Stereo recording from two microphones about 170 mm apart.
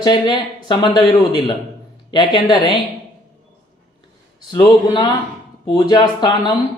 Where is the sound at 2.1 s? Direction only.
25° left (ahead or behind).